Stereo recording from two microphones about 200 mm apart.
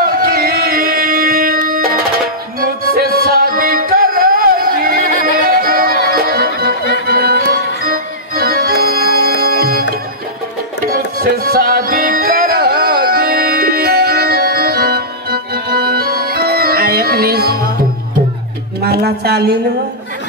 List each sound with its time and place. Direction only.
0.0 s music: 50° right (ahead or behind)
10.9 s music: 50° right (ahead or behind)
18.8 s a sound: 55° right (ahead or behind)